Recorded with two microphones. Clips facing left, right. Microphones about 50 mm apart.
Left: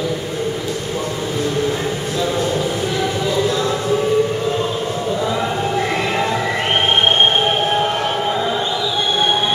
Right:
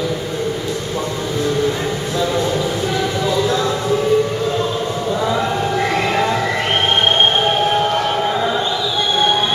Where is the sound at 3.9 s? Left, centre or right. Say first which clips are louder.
Right 1 dB; centre.